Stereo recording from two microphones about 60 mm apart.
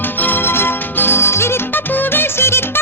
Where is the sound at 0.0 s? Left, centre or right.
Left.